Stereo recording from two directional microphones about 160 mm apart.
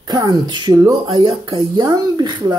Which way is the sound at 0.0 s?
25° right (ahead or behind).